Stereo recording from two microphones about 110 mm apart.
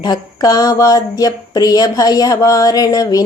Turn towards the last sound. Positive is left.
turn(degrees=35)  # may be behind; listen again after turning